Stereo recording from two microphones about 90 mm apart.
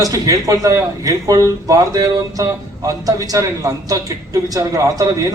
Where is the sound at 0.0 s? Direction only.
40° right (ahead or behind).